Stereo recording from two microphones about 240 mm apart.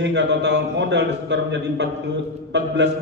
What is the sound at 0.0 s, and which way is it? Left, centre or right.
Speech, right.